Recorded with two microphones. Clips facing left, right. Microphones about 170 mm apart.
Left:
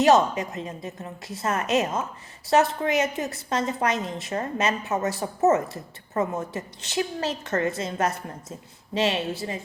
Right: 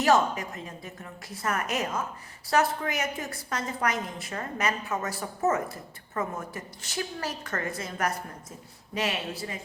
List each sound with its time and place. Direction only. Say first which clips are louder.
0.0 s a woman's voice: left 5 dB; 20° left (ahead or behind)